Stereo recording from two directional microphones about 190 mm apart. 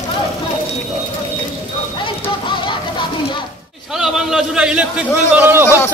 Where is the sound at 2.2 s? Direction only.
25° left (ahead or behind).